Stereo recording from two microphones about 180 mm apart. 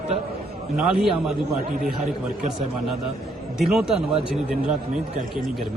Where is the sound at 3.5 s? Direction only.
5° right (ahead or behind).